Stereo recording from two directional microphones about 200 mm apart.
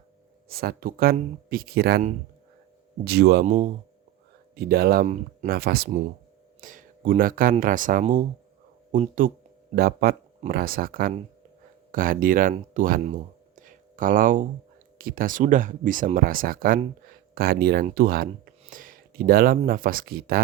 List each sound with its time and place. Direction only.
0.4 s speech: 50° right (ahead or behind)
3.4 s speech: 35° right (ahead or behind)
4.5 s speech: 50° right (ahead or behind)
13.6 s a sound: 40° right (ahead or behind)
14.9 s speech: 45° right (ahead or behind)